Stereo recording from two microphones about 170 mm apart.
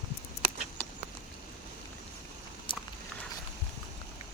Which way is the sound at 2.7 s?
30° left (ahead or behind).